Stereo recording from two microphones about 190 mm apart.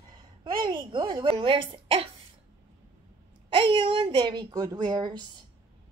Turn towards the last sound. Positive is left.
turn(degrees=-20)  # may be behind; listen again after turning